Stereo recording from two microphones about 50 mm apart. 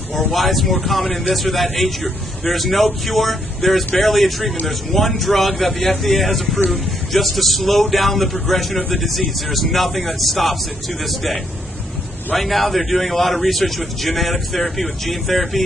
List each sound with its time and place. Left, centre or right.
0.3 s speech: centre
12.4 s speech: centre